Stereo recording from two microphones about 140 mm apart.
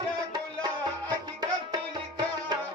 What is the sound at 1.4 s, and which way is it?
Music, 30° right (ahead or behind).